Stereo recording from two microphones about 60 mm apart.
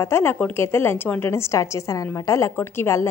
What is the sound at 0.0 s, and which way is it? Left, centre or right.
A woman's voice, left.